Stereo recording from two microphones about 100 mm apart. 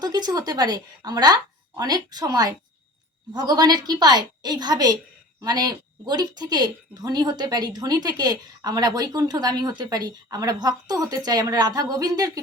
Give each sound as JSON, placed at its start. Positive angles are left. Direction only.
{"t": 0.0, "sound": "a woman's voice", "side_deg": -40}